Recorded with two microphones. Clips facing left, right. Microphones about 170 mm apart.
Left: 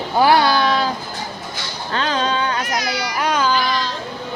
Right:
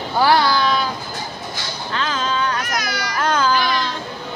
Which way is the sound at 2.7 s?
30° left (ahead or behind).